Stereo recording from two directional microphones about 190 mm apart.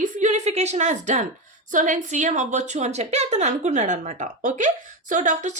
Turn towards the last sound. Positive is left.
turn(degrees=-40)  # may be behind; listen again after turning